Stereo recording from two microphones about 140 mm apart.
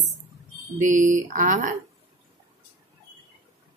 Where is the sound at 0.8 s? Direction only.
65° right (ahead or behind).